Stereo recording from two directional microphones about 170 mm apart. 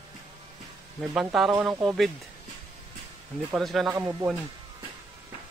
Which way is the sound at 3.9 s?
20° right (ahead or behind).